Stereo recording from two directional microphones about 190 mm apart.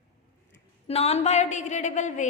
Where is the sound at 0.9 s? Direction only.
35° left (ahead or behind).